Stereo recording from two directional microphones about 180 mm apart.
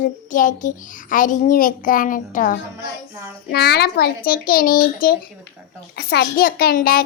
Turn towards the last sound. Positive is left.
turn(degrees=55)  # may be behind; listen again after turning